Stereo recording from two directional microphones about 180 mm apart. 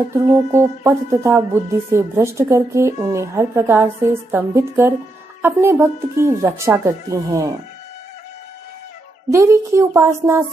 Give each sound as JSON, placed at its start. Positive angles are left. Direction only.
{"t": 0.1, "sound": "speech", "side_deg": -15}
{"t": 9.3, "sound": "speech", "side_deg": -15}